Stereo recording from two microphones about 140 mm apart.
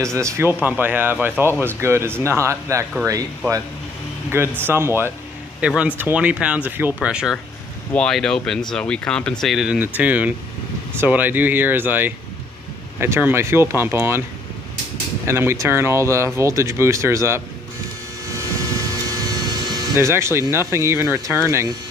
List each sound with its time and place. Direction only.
0.0 s speech: 20° right (ahead or behind)
7.9 s speech: 5° left (ahead or behind); by 14.2 s 15° right (ahead or behind)
15.2 s speech: 20° right (ahead or behind)
19.7 s speech: 20° right (ahead or behind)